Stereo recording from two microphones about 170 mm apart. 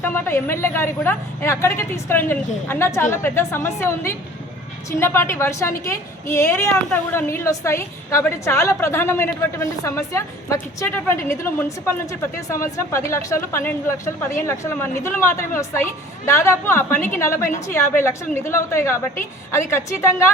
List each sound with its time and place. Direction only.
0.0 s a woman's voice: 15° left (ahead or behind)